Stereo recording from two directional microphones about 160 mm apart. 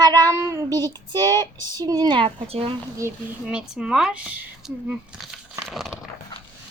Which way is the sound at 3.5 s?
5° right (ahead or behind).